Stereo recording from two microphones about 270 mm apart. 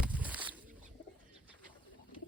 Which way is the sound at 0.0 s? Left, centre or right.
Centre.